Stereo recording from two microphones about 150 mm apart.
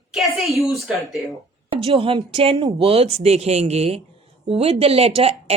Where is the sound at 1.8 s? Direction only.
35° right (ahead or behind).